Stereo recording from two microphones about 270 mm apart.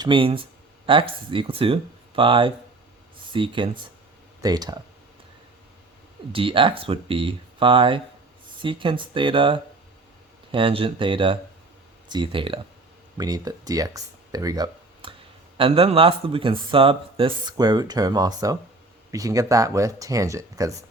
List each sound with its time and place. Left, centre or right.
0.0 s speech: centre
6.3 s speech: centre